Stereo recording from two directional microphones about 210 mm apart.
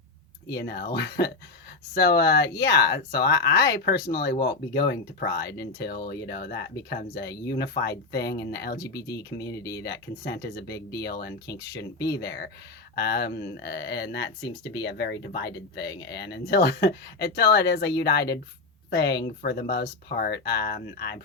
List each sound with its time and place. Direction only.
0.5 s speech: 50° left (ahead or behind)
9.0 s speech: 15° left (ahead or behind)
9.8 s speech: 50° left (ahead or behind)
11.4 s speech: 15° left (ahead or behind)
12.2 s speech: 50° left (ahead or behind)